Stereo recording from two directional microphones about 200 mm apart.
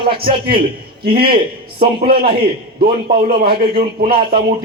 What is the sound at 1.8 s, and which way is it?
A man's voice, 50° right (ahead or behind).